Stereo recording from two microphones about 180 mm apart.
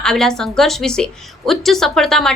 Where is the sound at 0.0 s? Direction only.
5° left (ahead or behind).